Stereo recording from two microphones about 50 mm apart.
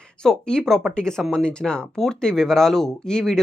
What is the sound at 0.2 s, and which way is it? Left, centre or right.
Speech, centre.